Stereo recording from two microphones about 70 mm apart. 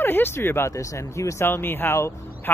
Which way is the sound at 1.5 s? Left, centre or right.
Left.